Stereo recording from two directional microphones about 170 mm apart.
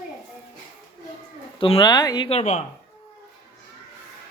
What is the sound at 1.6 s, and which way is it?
Speech, 30° left (ahead or behind).